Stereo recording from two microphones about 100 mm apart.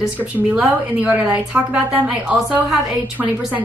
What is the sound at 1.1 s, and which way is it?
A woman's voice, 15° right (ahead or behind).